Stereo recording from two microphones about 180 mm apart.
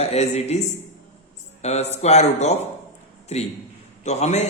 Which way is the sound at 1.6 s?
35° left (ahead or behind).